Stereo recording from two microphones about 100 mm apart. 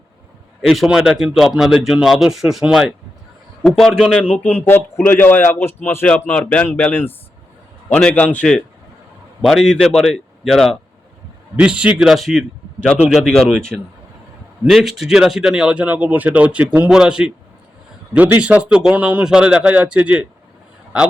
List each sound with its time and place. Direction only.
0.6 s a man's voice: centre (ahead or behind)
11.5 s a man's voice: 10° right (ahead or behind)